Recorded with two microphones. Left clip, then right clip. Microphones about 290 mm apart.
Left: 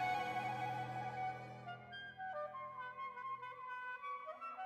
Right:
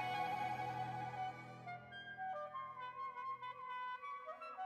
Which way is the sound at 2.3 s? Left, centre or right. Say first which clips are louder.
Left 1 dB; centre.